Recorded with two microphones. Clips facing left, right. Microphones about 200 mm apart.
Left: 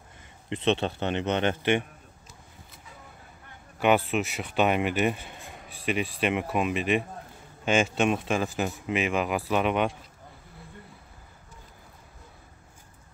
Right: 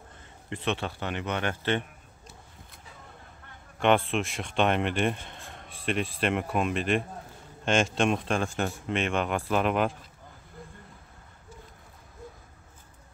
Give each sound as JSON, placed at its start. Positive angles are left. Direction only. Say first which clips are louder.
{"t": 0.5, "sound": "a man's voice", "louder": "left 5 dB", "side_deg": 20}
{"t": 3.8, "sound": "speech", "louder": "left 1 dB", "side_deg": 5}